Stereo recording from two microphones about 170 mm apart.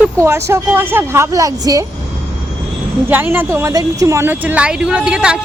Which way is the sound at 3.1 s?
10° right (ahead or behind).